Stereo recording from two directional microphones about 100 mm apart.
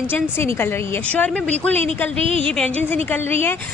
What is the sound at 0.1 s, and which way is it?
Speech, 20° left (ahead or behind).